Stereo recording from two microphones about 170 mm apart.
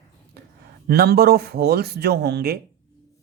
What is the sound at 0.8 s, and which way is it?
Speech, 70° right (ahead or behind).